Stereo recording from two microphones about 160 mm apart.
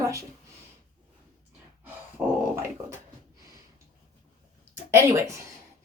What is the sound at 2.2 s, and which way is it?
Dog, 15° right (ahead or behind).